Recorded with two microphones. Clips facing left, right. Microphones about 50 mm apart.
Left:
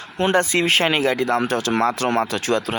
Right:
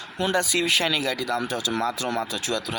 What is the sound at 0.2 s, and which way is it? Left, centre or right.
Speech, left.